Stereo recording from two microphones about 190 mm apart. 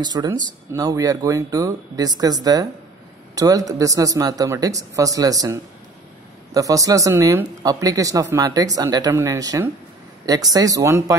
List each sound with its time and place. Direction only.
0.0 s speech: 20° right (ahead or behind)